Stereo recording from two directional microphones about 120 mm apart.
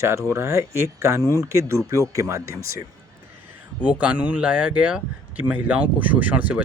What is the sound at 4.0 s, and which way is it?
Speech, 10° right (ahead or behind).